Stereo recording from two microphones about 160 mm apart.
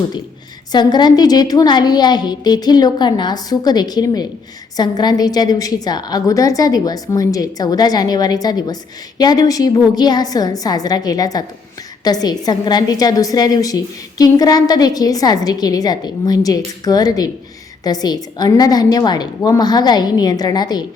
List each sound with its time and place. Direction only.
0.7 s a woman's voice: 25° left (ahead or behind)